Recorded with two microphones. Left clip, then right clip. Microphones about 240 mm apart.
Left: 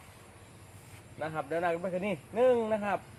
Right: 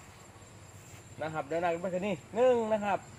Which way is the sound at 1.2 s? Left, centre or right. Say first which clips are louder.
Even; centre.